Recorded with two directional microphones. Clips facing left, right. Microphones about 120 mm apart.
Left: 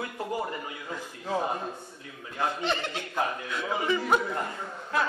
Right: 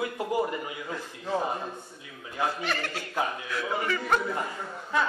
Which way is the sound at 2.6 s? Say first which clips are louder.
Left 2 dB; 20° left (ahead or behind).